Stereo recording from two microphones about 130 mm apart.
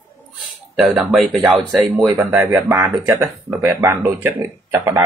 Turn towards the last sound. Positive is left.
turn(degrees=-20)  # may be behind; listen again after turning